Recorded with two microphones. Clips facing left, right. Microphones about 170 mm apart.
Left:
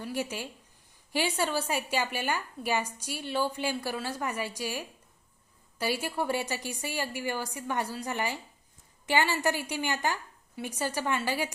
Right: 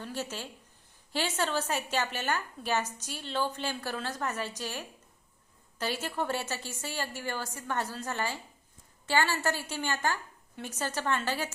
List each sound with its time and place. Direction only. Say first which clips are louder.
0.0 s a woman's voice: left 3 dB; 10° left (ahead or behind)